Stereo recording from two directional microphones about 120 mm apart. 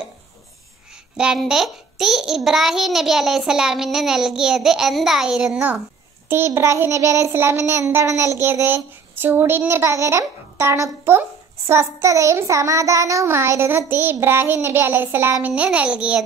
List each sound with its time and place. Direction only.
1.1 s a child's voice: 5° right (ahead or behind)
6.2 s child singing: 20° right (ahead or behind)
14.2 s a child's voice: 20° right (ahead or behind)